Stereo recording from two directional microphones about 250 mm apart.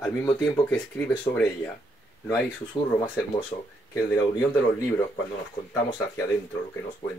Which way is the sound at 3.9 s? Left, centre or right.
Centre.